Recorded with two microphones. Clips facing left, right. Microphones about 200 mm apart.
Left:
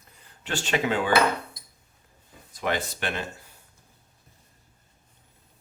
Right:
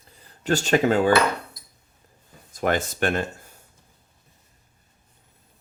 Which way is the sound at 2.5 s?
45° right (ahead or behind).